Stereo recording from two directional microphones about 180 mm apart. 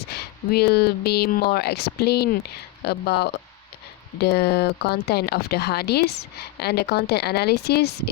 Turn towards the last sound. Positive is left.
turn(degrees=65)  # may be behind; listen again after turning